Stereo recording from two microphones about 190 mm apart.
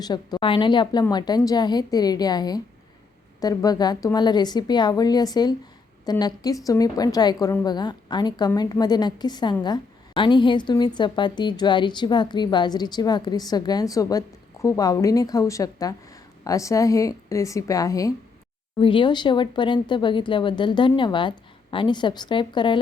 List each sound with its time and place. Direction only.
0.0 s a woman's voice: 20° left (ahead or behind)